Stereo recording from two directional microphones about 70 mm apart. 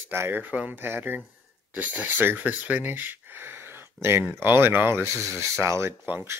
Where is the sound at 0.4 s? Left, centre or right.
Right.